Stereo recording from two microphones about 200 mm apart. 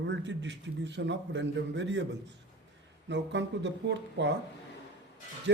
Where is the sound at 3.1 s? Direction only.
60° right (ahead or behind).